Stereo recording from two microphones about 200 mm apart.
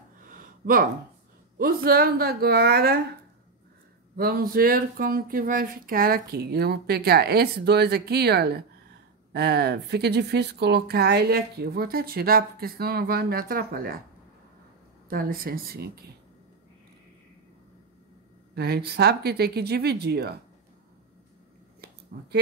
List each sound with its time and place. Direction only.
0.3 s a sound: 45° right (ahead or behind)
1.6 s speech: 50° right (ahead or behind)
4.2 s speech: 45° right (ahead or behind)
15.0 s speech: 45° right (ahead or behind)
18.5 s speech: 55° right (ahead or behind)
22.1 s speech: 50° right (ahead or behind)